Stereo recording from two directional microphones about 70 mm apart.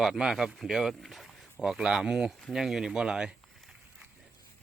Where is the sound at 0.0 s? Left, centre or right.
Centre.